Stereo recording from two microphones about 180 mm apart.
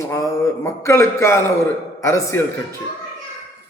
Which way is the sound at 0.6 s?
15° left (ahead or behind).